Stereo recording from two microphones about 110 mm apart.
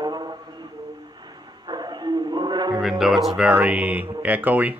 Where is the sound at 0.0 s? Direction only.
40° right (ahead or behind).